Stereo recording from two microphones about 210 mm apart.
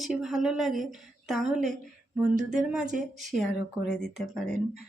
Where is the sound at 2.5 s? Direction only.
5° right (ahead or behind).